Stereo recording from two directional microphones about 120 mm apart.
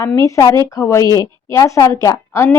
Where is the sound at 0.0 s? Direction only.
25° left (ahead or behind).